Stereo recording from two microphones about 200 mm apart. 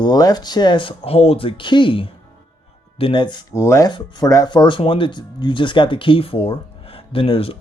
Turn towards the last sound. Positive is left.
turn(degrees=30)  # may be behind; listen again after turning